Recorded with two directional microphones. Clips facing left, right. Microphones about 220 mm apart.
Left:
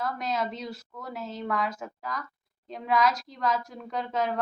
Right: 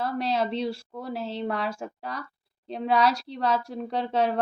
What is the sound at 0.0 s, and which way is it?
A woman's voice, 30° right (ahead or behind).